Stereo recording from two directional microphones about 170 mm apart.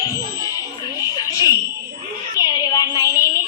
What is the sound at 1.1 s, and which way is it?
Fire alarm, 20° left (ahead or behind).